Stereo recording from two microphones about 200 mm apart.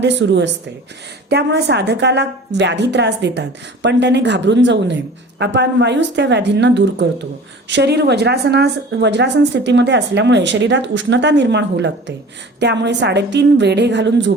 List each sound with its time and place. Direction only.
0.0 s a woman's voice: 65° right (ahead or behind)